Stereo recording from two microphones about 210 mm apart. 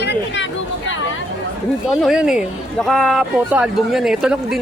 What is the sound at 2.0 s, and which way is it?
Speech, 5° right (ahead or behind).